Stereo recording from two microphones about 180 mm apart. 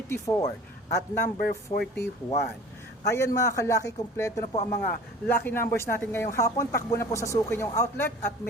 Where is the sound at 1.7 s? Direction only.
20° left (ahead or behind).